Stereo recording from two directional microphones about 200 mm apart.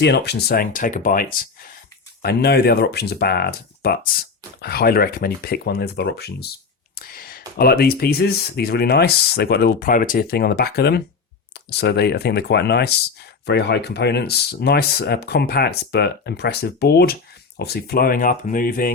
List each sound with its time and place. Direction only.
0.0 s speech: 55° left (ahead or behind)